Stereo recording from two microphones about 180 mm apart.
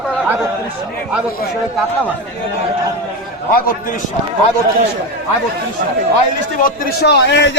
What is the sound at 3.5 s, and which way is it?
Speech, 50° left (ahead or behind).